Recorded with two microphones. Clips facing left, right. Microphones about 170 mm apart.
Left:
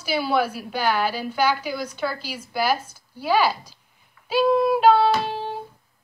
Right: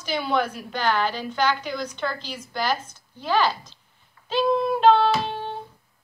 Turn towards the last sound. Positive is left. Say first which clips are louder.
# left 2 dB
turn(degrees=5)  # may be behind; listen again after turning